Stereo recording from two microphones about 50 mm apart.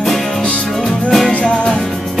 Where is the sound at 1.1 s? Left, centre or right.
Centre.